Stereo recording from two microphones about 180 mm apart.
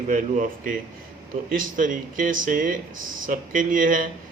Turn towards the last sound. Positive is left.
turn(degrees=-50)  # may be behind; listen again after turning